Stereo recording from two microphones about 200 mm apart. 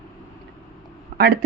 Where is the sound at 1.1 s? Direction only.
45° right (ahead or behind).